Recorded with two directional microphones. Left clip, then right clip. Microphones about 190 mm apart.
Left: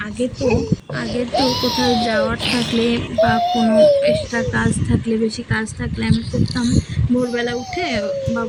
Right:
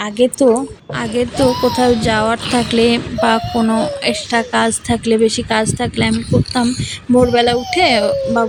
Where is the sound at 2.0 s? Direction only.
35° right (ahead or behind).